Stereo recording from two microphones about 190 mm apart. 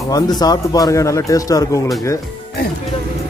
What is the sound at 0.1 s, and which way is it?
Speech, 20° left (ahead or behind).